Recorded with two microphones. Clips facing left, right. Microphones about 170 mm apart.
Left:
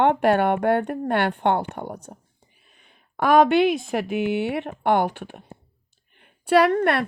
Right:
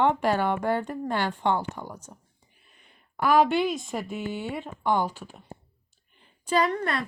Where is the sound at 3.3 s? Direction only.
70° left (ahead or behind).